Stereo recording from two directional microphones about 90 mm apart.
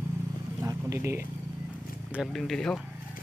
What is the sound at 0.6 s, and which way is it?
Speech, 30° right (ahead or behind).